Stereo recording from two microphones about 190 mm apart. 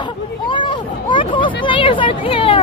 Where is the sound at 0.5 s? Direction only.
25° left (ahead or behind).